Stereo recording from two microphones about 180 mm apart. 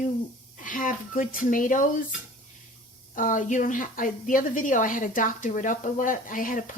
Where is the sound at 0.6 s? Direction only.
45° left (ahead or behind).